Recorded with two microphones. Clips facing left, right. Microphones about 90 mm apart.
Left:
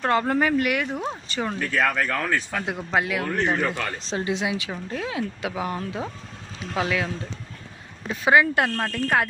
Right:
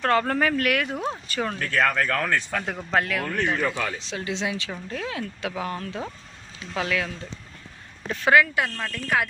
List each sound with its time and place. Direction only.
0.0 s speech: 10° left (ahead or behind); by 4.3 s 30° left (ahead or behind)
4.3 s speech: 15° left (ahead or behind)
8.5 s speech: 50° left (ahead or behind)